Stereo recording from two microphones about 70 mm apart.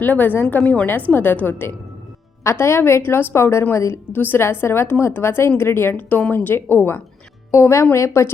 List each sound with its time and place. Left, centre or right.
0.0 s a woman's voice: left
2.4 s a woman's voice: left
4.1 s a woman's voice: left